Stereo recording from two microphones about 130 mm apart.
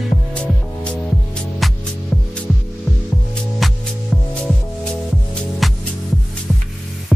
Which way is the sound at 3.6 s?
Centre (ahead or behind).